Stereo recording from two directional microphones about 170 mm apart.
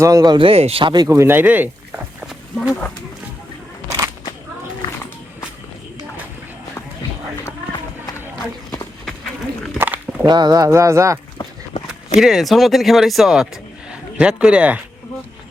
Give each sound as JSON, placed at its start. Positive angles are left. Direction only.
{"t": 0.0, "sound": "speech", "side_deg": -20}
{"t": 1.0, "sound": "speech", "side_deg": -15}
{"t": 2.6, "sound": "speech", "side_deg": 5}
{"t": 3.8, "sound": "a sound", "side_deg": -20}
{"t": 9.7, "sound": "a sound", "side_deg": -10}
{"t": 10.2, "sound": "speech", "side_deg": -25}
{"t": 11.9, "sound": "speech", "side_deg": -5}